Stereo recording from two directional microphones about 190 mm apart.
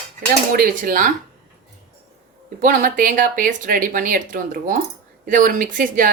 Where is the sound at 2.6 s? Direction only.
45° right (ahead or behind).